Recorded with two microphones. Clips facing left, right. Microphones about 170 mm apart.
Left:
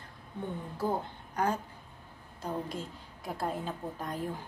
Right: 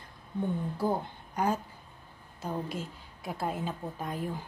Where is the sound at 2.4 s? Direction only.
5° right (ahead or behind).